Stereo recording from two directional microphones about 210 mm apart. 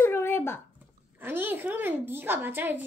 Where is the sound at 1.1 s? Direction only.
10° right (ahead or behind).